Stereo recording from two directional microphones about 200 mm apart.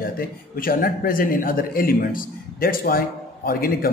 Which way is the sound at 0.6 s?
45° left (ahead or behind).